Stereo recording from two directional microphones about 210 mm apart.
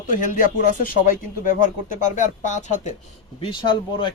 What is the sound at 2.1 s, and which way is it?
Speech, 35° left (ahead or behind).